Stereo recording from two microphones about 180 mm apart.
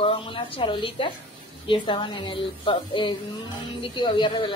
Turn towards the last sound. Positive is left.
turn(degrees=25)  # may be behind; listen again after turning